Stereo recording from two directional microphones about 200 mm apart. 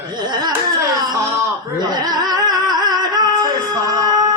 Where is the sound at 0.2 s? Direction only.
20° right (ahead or behind).